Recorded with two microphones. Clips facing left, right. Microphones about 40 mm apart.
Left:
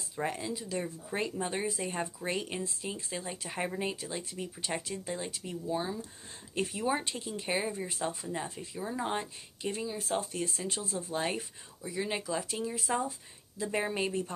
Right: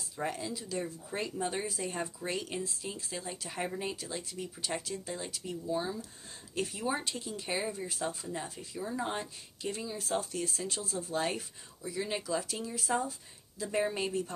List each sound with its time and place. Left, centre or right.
0.1 s speech: centre